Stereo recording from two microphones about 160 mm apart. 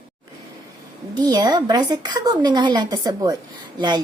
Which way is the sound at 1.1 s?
25° right (ahead or behind).